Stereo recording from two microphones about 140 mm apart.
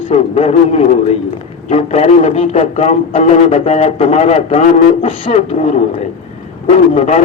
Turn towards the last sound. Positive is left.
turn(degrees=50)  # may be behind; listen again after turning